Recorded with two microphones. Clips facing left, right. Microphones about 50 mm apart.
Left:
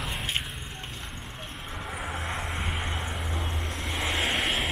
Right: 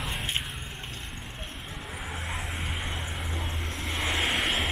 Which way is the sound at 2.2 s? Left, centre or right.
Centre.